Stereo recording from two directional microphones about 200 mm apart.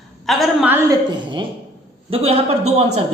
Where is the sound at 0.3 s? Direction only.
5° right (ahead or behind).